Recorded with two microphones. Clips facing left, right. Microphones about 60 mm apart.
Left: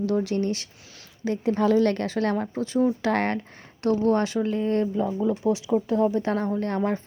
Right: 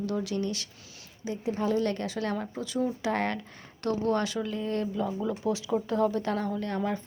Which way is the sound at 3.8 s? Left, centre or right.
Left.